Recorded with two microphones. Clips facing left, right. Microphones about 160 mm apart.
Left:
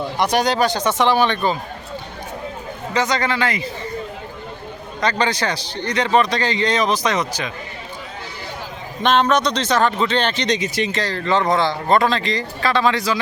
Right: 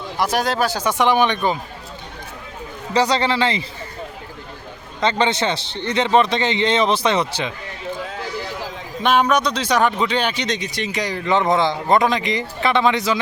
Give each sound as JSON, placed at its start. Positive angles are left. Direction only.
{"t": 0.2, "sound": "speech", "side_deg": 0}
{"t": 2.9, "sound": "speech", "side_deg": -30}
{"t": 4.9, "sound": "speech", "side_deg": -25}
{"t": 9.0, "sound": "speech", "side_deg": -10}
{"t": 10.9, "sound": "speech", "side_deg": -15}